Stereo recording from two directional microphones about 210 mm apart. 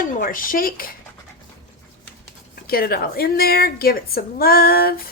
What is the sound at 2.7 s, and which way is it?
A woman's voice, 45° left (ahead or behind).